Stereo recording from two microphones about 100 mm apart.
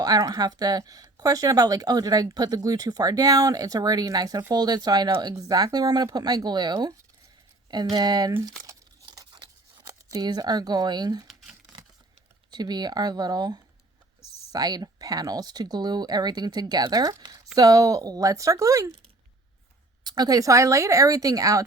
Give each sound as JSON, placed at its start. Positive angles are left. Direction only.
{"t": 0.0, "sound": "speech", "side_deg": -40}
{"t": 8.6, "sound": "tearing", "side_deg": -40}
{"t": 11.3, "sound": "computer keyboard", "side_deg": -5}
{"t": 12.5, "sound": "speech", "side_deg": -45}
{"t": 20.1, "sound": "speech", "side_deg": -40}